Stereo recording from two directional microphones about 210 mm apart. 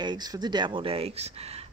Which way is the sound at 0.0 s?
20° right (ahead or behind).